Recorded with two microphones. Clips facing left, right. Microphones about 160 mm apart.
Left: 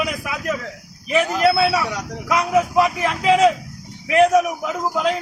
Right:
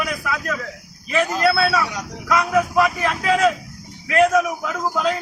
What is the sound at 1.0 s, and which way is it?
A man's voice, 15° left (ahead or behind).